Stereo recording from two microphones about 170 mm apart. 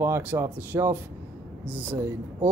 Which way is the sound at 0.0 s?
15° right (ahead or behind).